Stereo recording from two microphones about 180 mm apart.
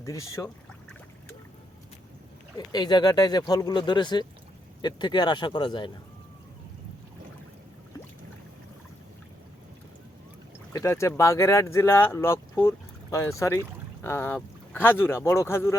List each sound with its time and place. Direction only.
0.0 s speech: 15° left (ahead or behind)
2.7 s speech: 25° left (ahead or behind)
10.7 s speech: 15° left (ahead or behind)